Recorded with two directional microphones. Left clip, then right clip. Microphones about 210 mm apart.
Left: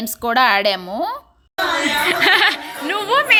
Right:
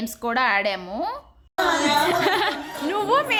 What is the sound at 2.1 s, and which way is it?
Speech, centre (ahead or behind).